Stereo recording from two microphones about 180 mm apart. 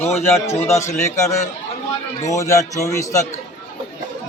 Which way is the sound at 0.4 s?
15° left (ahead or behind).